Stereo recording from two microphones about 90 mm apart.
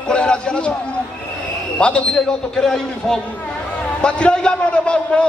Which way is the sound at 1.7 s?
10° left (ahead or behind).